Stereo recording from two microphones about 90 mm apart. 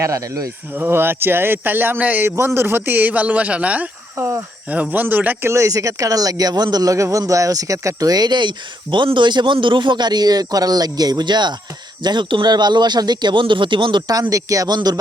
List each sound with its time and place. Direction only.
0.0 s speech: 40° right (ahead or behind)
0.7 s speech: 25° right (ahead or behind)
2.3 s a man's voice: 30° right (ahead or behind); by 14.0 s 60° right (ahead or behind)
14.1 s speech: 45° right (ahead or behind)